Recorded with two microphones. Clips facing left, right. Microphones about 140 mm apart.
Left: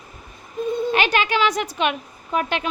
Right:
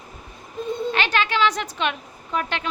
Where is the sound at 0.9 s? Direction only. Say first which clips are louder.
Left 1 dB; 15° left (ahead or behind).